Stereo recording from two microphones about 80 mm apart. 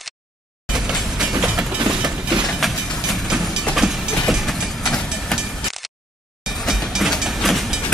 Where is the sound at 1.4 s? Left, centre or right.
Centre.